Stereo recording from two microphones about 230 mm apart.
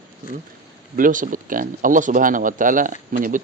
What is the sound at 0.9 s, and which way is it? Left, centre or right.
Speech, right.